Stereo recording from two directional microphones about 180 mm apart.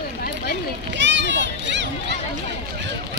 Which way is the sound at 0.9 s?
85° right.